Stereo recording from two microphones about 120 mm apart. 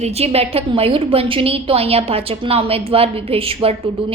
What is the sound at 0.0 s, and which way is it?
A woman's voice, 60° right (ahead or behind).